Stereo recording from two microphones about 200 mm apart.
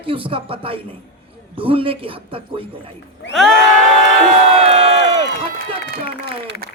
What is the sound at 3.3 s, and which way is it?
Crowd, centre (ahead or behind).